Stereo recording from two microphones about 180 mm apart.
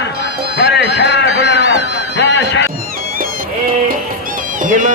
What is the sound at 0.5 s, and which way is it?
Music, 70° left (ahead or behind).